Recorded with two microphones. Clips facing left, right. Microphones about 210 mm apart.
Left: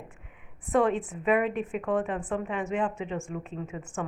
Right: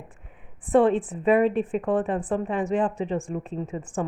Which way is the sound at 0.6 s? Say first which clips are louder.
Right 5 dB; 30° right (ahead or behind).